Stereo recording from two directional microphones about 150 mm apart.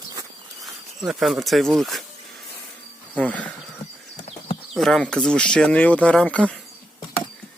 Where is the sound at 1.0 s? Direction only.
Centre (ahead or behind).